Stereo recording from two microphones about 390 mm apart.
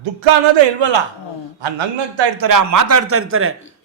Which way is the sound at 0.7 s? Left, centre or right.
Right.